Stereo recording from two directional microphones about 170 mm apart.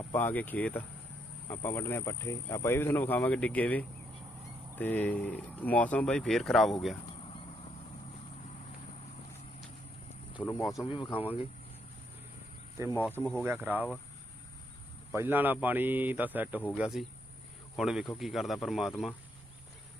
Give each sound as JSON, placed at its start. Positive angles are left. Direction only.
{"t": 0.1, "sound": "speech", "side_deg": 10}
{"t": 10.4, "sound": "speech", "side_deg": 20}
{"t": 10.8, "sound": "speech", "side_deg": 30}
{"t": 12.9, "sound": "speech", "side_deg": 10}
{"t": 13.4, "sound": "a man's voice", "side_deg": -10}
{"t": 15.1, "sound": "a man's voice", "side_deg": -10}